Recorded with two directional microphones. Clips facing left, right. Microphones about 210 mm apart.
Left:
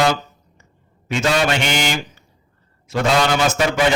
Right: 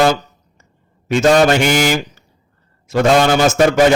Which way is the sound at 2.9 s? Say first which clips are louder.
Right 5 dB; 45° right (ahead or behind).